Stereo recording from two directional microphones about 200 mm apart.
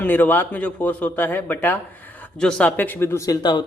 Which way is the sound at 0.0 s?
10° left (ahead or behind).